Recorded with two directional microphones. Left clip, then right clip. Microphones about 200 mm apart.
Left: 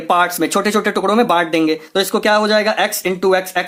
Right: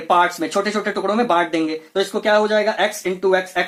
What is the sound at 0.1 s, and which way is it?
Speech, 35° left (ahead or behind).